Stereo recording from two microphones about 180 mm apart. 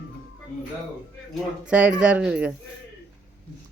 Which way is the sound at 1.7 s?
5° right (ahead or behind).